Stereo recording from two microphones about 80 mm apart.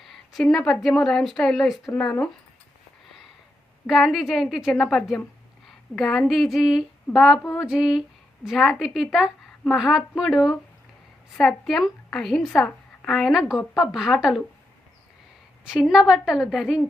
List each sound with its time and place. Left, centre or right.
0.0 s a sound: centre
0.7 s a woman's voice: centre
3.8 s a woman's voice: centre
15.6 s a woman's voice: centre